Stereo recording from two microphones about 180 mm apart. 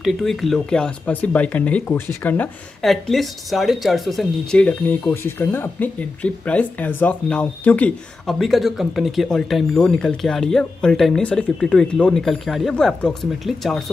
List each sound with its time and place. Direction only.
0.0 s speech: centre (ahead or behind)